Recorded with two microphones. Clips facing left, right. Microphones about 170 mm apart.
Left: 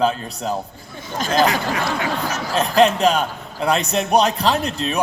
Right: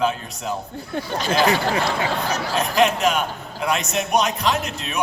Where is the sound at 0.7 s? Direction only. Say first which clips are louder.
Right 9 dB; 70° right (ahead or behind).